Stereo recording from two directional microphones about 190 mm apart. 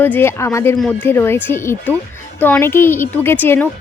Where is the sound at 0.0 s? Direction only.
10° left (ahead or behind).